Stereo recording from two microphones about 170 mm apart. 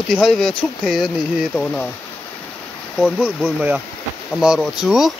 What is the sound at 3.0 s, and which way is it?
Speech, centre (ahead or behind).